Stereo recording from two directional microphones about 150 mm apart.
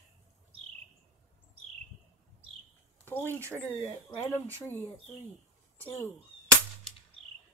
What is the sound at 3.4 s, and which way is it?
Speech, 20° right (ahead or behind).